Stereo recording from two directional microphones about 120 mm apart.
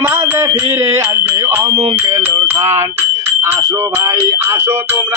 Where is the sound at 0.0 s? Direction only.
20° right (ahead or behind).